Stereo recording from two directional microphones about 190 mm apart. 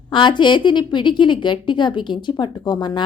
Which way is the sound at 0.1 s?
25° left (ahead or behind).